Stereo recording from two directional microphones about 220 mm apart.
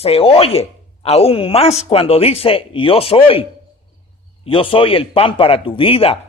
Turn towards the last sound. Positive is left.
turn(degrees=25)  # may be behind; listen again after turning